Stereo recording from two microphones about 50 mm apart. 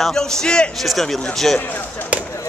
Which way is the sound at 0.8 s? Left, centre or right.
Centre.